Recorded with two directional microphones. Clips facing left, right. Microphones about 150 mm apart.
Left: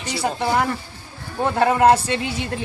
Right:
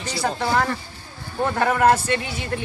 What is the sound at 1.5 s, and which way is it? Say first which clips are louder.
Speech: left 3 dB; 30° left (ahead or behind).